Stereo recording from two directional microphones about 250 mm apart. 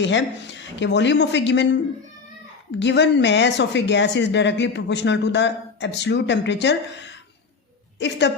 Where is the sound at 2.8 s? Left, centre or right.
Left.